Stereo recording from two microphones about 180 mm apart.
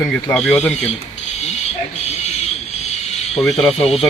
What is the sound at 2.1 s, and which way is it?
Vehicle, 35° left (ahead or behind).